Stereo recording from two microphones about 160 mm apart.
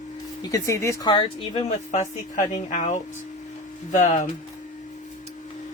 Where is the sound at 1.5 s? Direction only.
45° left (ahead or behind).